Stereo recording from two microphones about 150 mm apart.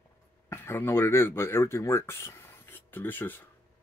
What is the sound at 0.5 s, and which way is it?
Speech, 15° left (ahead or behind).